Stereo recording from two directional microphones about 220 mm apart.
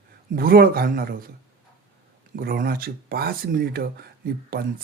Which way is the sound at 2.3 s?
40° right (ahead or behind).